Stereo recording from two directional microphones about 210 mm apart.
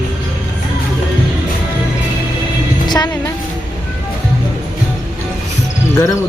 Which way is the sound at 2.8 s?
20° left (ahead or behind).